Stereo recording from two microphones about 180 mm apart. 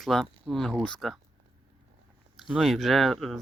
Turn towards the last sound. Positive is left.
turn(degrees=0)  # may be behind; listen again after turning